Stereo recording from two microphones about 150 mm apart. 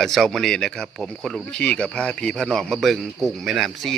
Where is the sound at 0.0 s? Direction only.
Centre (ahead or behind).